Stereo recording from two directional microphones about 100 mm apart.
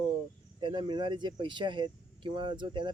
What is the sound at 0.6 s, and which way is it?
Speech, 55° right (ahead or behind).